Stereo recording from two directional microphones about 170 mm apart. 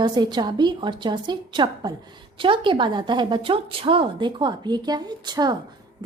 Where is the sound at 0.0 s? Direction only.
25° right (ahead or behind).